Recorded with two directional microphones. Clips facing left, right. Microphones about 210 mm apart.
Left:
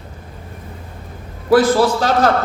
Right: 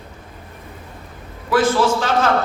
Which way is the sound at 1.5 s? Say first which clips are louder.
Left 4 dB; 35° left (ahead or behind).